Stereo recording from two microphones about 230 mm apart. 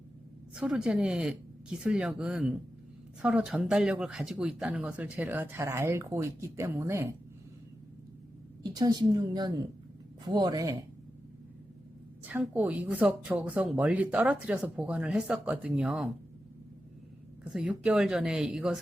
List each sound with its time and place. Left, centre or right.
0.5 s speech: centre
8.7 s a woman's voice: centre
12.2 s speech: centre
17.5 s speech: centre